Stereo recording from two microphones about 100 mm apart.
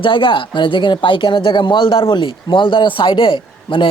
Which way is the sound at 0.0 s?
55° left (ahead or behind).